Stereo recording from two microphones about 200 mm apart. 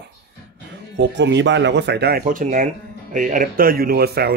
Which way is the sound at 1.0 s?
60° right (ahead or behind).